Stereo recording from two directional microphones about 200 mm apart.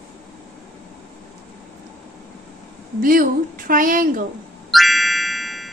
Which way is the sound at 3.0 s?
45° right (ahead or behind).